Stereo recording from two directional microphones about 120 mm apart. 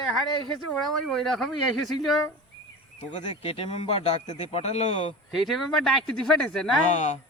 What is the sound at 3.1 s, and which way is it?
Speech, 45° left (ahead or behind).